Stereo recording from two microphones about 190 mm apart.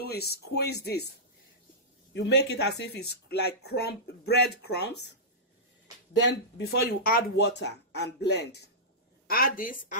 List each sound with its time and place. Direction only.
0.0 s speech: 55° left (ahead or behind)
2.1 s speech: 65° left (ahead or behind)
6.1 s speech: 60° left (ahead or behind)
9.3 s speech: 50° left (ahead or behind)